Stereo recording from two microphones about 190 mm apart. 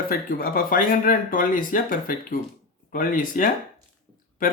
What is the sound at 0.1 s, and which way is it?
Speech, 50° left (ahead or behind).